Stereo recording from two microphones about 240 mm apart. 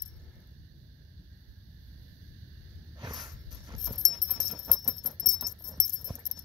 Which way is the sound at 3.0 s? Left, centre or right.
Centre.